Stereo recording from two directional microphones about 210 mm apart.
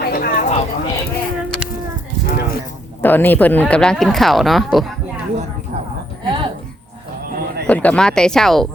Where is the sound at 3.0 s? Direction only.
10° left (ahead or behind).